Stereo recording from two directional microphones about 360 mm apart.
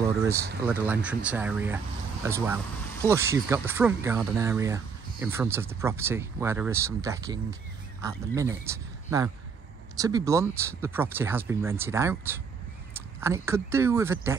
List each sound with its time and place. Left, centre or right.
0.2 s speech: centre